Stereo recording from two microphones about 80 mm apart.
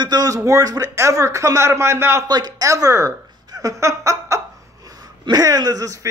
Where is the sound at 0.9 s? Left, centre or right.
Right.